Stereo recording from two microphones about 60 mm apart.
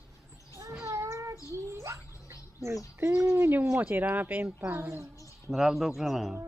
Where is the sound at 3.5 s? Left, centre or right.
Right.